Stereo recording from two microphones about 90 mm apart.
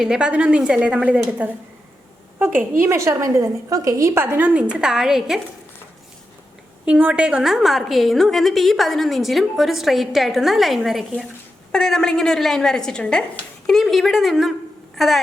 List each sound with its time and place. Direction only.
0.0 s a woman's voice: 10° right (ahead or behind)
6.8 s a woman's voice: 15° right (ahead or behind)
11.7 s a woman's voice: 5° left (ahead or behind)